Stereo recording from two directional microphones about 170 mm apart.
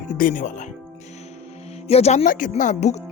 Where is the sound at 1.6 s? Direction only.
40° left (ahead or behind).